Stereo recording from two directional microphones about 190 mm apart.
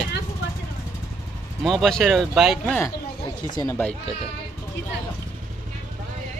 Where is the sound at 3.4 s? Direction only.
20° left (ahead or behind).